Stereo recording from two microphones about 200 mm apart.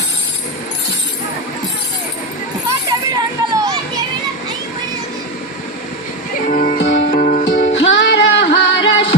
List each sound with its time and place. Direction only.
2.9 s children playing: 20° right (ahead or behind)
6.8 s music: 60° left (ahead or behind)
7.2 s music: 40° left (ahead or behind)
7.5 s music: 65° left (ahead or behind)